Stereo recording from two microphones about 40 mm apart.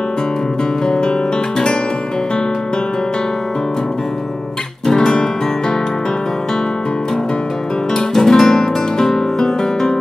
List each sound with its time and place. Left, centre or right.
0.8 s guitar: centre
4.8 s guitar: centre
5.1 s music: left
7.9 s music: centre